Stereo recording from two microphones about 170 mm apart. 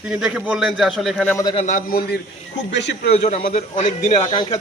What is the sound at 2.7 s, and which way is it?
Speech, 90° left.